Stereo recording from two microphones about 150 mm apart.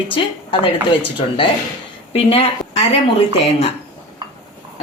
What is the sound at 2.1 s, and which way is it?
Speech, 40° left (ahead or behind).